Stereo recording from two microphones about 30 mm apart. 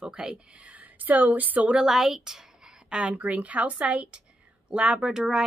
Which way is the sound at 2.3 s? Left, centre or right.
Centre.